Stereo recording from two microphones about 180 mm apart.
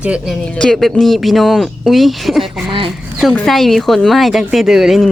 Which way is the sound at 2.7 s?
30° right (ahead or behind).